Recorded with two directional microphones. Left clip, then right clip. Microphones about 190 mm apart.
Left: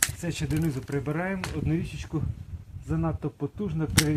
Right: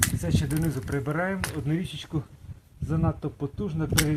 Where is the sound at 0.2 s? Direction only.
25° right (ahead or behind).